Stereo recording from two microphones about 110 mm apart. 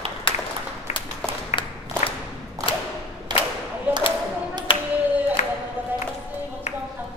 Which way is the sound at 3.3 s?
40° right (ahead or behind).